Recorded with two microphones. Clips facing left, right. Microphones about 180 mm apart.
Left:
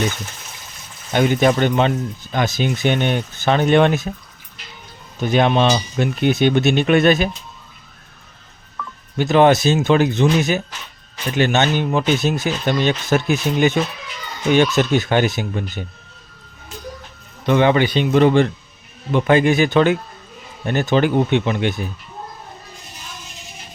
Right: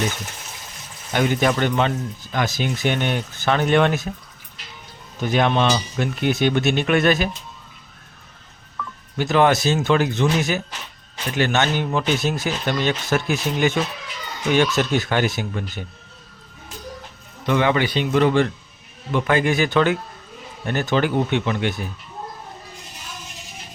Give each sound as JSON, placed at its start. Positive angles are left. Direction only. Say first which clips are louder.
{"t": 1.1, "sound": "speech", "louder": "left 4 dB", "side_deg": 20}
{"t": 5.2, "sound": "speech", "louder": "left 3 dB", "side_deg": 20}
{"t": 9.1, "sound": "speech", "louder": "left 4 dB", "side_deg": 20}
{"t": 17.4, "sound": "speech", "louder": "left 4 dB", "side_deg": 25}